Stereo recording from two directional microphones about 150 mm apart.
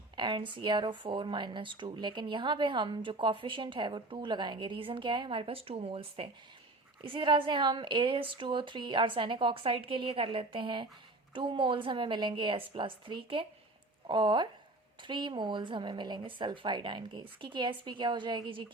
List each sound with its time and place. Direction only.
0.2 s speech: 30° right (ahead or behind)